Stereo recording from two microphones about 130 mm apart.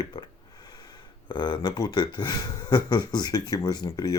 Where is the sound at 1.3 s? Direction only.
35° left (ahead or behind).